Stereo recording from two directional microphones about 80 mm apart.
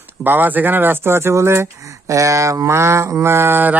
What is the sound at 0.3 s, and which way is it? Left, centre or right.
Speech, right.